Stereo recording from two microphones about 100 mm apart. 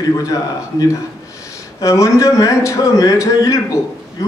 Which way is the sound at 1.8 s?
35° left (ahead or behind).